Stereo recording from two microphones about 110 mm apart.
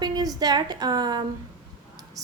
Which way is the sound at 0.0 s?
35° right (ahead or behind).